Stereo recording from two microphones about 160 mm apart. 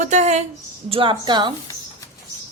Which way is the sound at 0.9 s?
30° right (ahead or behind).